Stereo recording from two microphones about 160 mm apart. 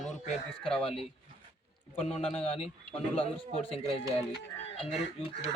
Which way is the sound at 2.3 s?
40° left (ahead or behind).